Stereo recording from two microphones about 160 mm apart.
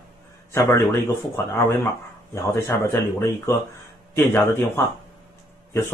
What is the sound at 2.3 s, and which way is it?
Speech, 20° left (ahead or behind).